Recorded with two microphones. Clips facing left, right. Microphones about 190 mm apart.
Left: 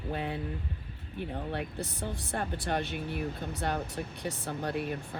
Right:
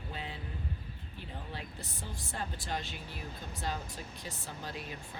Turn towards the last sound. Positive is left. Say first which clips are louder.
# left 10 dB
turn(degrees=60)  # may be behind; listen again after turning